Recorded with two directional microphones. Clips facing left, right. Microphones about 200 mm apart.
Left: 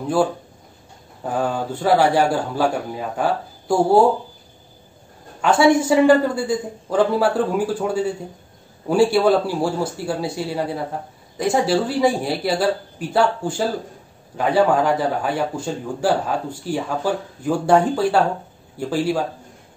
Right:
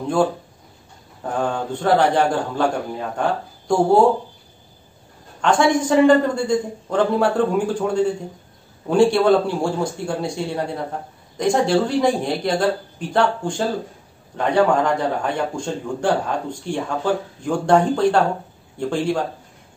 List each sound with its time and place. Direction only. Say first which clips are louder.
0.0 s a man's voice: even; 5° left (ahead or behind)
5.4 s a man's voice: left 2 dB; 5° left (ahead or behind)